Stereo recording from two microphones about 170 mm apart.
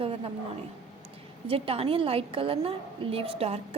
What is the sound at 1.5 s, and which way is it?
A woman's voice, 35° right (ahead or behind).